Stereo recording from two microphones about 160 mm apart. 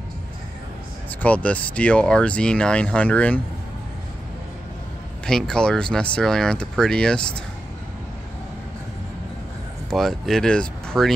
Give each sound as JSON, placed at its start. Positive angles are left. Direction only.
{"t": 1.2, "sound": "speech", "side_deg": 10}
{"t": 5.2, "sound": "speech", "side_deg": 5}
{"t": 9.8, "sound": "speech", "side_deg": 0}